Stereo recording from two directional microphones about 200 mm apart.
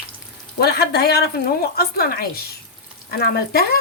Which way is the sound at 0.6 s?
50° left (ahead or behind).